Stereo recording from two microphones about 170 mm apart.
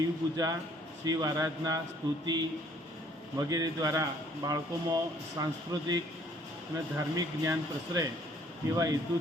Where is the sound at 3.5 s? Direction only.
20° right (ahead or behind).